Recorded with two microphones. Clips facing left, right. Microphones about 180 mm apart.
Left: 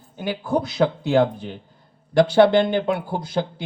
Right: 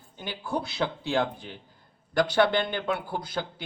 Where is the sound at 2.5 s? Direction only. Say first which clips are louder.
Left 9 dB; 50° left (ahead or behind).